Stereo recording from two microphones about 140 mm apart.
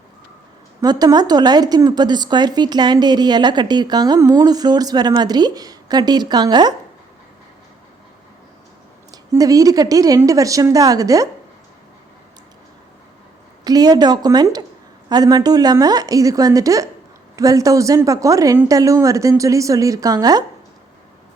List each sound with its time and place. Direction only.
0.8 s a woman's voice: 25° right (ahead or behind)
9.3 s a woman's voice: 25° right (ahead or behind)
13.7 s a woman's voice: 30° right (ahead or behind)